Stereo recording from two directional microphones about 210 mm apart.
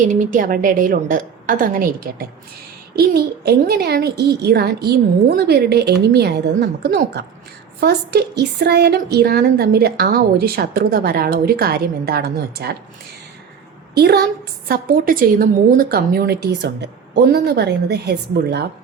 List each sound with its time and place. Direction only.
0.0 s a woman's voice: 40° right (ahead or behind)
13.9 s a woman's voice: 50° right (ahead or behind)